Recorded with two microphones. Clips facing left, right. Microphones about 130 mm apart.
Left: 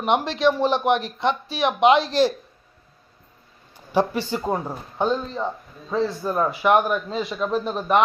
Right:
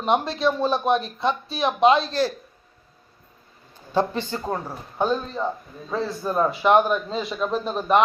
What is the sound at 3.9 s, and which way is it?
Speech, 15° left (ahead or behind).